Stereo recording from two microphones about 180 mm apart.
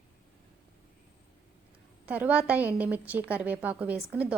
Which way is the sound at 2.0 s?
10° right (ahead or behind).